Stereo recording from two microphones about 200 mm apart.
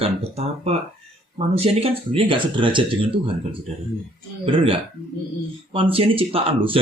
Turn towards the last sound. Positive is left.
turn(degrees=-25)  # may be behind; listen again after turning